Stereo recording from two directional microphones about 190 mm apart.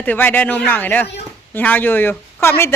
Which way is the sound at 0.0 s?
10° left (ahead or behind).